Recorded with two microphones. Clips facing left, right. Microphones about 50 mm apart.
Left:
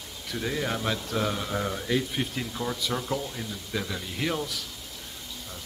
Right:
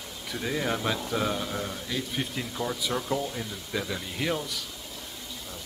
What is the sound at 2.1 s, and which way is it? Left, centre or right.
Speech, centre.